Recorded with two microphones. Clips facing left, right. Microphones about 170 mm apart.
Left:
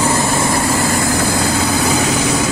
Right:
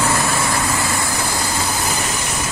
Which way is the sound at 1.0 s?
90° left.